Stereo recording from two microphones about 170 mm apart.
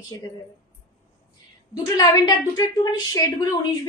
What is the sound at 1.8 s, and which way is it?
A woman's voice, 25° left (ahead or behind).